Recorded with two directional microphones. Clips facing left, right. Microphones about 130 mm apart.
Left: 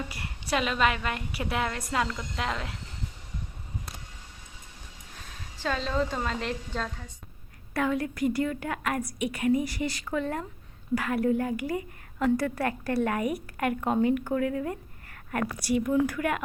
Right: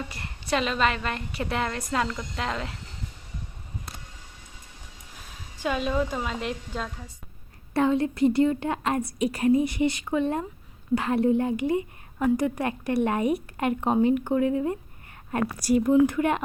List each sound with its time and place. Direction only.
0.1 s a woman's voice: 5° left (ahead or behind)
5.5 s a woman's voice: 15° right (ahead or behind)
7.7 s a woman's voice: 25° right (ahead or behind)
15.6 s speech: 40° right (ahead or behind)
15.9 s a woman's voice: 25° right (ahead or behind)